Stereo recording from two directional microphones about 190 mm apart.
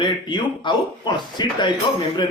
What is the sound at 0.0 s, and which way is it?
A man's voice, 25° left (ahead or behind).